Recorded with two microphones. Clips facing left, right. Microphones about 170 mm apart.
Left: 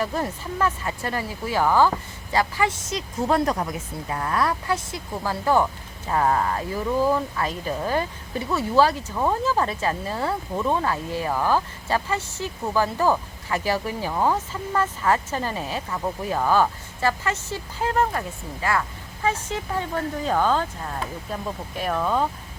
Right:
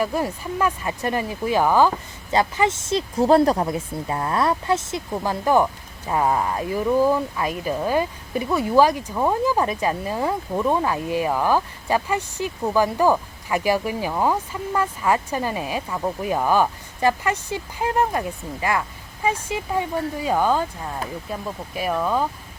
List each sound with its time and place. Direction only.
0.0 s speech: 10° right (ahead or behind)
21.8 s speech: 5° right (ahead or behind)